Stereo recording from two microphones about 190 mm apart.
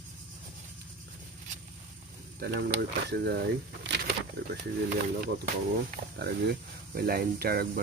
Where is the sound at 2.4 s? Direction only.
60° right (ahead or behind).